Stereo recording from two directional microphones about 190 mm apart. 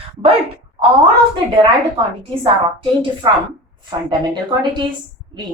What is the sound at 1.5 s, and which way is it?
A woman's voice, 25° right (ahead or behind).